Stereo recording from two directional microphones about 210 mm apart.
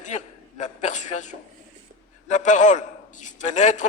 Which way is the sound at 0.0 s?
35° left (ahead or behind).